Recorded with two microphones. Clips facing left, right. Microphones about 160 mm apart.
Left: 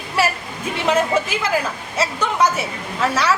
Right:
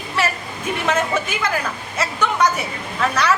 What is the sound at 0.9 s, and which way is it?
Speech, 30° left (ahead or behind).